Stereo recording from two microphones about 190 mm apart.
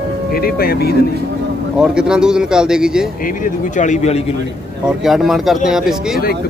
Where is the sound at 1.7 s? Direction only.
5° right (ahead or behind).